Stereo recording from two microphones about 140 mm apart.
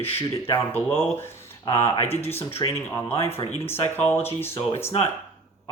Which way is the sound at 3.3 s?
45° left (ahead or behind).